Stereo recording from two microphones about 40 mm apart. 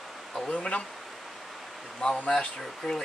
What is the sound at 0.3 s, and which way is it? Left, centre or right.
Speech, left.